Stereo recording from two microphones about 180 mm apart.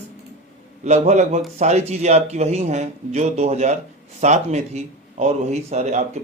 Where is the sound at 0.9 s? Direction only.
40° right (ahead or behind).